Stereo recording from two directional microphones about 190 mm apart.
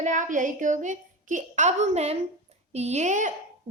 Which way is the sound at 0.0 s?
40° right (ahead or behind).